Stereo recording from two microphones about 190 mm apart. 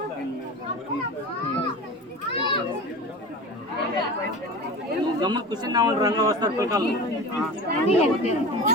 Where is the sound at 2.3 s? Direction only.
25° left (ahead or behind).